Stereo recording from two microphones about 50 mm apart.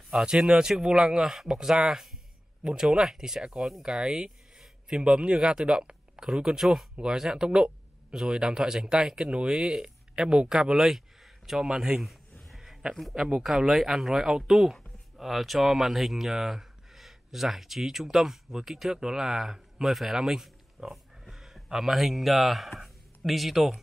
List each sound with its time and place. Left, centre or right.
0.2 s speech: centre
6.6 s speech: centre
12.4 s a sound: centre
13.1 s speech: centre